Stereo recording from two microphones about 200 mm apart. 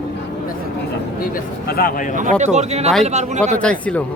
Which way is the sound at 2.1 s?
40° right (ahead or behind).